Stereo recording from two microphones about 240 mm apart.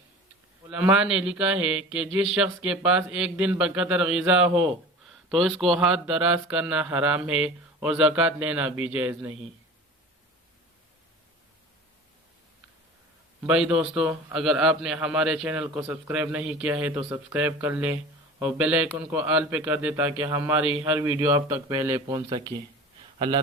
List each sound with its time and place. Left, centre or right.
0.7 s a man's voice: centre
13.5 s a man's voice: centre; by 23.4 s right